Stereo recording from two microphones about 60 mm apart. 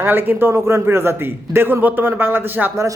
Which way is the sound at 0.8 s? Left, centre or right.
Right.